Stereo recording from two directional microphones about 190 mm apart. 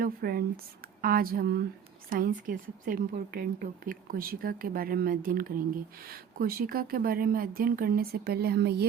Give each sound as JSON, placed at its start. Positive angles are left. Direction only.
{"t": 0.0, "sound": "a woman's voice", "side_deg": -50}